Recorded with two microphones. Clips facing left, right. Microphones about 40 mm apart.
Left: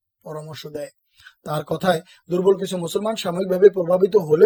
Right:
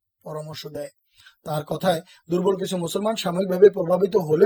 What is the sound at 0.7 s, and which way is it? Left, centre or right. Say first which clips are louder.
Speech: left 2 dB; left.